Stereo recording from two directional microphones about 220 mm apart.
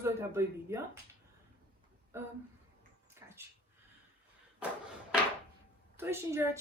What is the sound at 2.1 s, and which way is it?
Speech, 10° right (ahead or behind).